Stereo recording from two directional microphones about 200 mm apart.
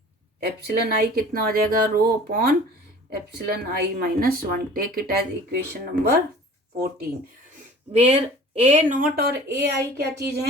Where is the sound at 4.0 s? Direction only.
50° right (ahead or behind).